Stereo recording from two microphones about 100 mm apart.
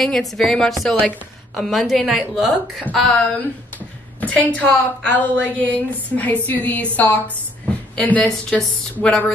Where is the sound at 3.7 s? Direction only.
15° left (ahead or behind).